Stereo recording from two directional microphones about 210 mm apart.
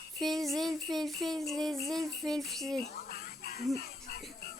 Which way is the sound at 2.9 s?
45° left (ahead or behind).